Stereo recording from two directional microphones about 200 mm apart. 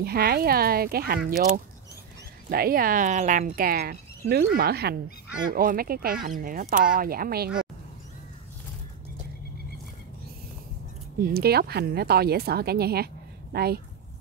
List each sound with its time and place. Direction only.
0.0 s a woman's voice: 50° right (ahead or behind)
2.5 s a woman's voice: 50° right (ahead or behind)
11.1 s a woman's voice: 50° right (ahead or behind)